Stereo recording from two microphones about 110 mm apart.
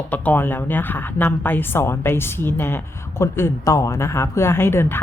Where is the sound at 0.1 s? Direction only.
15° left (ahead or behind).